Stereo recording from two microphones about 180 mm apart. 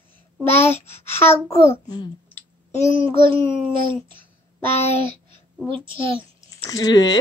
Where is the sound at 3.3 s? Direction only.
30° right (ahead or behind).